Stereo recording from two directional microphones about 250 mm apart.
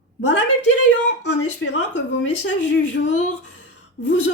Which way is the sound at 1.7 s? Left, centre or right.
Left.